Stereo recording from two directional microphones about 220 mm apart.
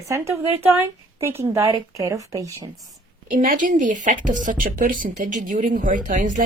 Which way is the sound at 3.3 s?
35° right (ahead or behind).